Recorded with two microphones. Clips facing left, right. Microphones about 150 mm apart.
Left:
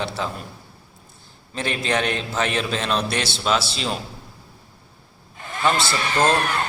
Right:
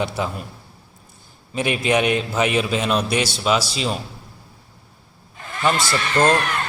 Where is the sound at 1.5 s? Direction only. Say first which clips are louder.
Right 4 dB; 10° right (ahead or behind).